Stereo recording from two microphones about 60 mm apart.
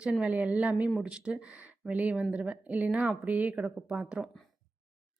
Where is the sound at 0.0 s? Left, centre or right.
Centre.